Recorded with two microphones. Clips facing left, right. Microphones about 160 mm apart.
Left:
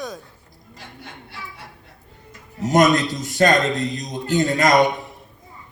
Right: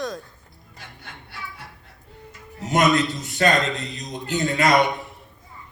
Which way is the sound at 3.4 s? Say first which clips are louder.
Left 3 dB; 40° left (ahead or behind).